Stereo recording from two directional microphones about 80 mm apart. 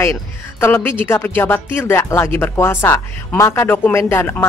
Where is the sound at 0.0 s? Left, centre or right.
Left.